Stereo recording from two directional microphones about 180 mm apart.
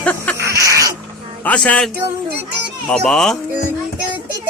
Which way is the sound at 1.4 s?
5° left (ahead or behind).